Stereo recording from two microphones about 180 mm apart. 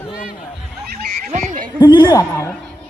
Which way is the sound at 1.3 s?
40° right (ahead or behind).